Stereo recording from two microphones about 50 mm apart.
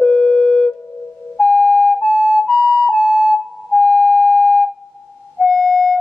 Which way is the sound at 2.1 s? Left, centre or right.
Centre.